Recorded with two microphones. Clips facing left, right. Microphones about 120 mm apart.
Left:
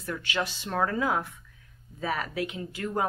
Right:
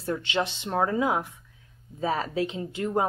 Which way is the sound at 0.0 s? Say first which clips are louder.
Right 4 dB; 25° right (ahead or behind).